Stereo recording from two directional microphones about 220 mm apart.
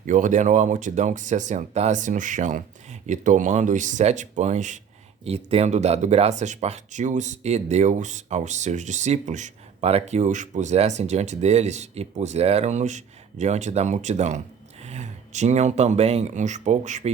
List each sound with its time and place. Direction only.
0.0 s speech: 35° right (ahead or behind)